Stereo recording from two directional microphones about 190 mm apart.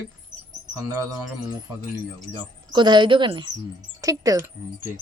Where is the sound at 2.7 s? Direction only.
25° right (ahead or behind).